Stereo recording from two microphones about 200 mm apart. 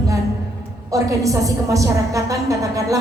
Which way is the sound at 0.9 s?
15° right (ahead or behind).